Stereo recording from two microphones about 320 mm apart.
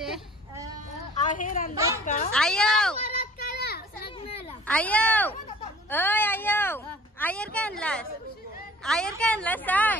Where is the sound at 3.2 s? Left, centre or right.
Left.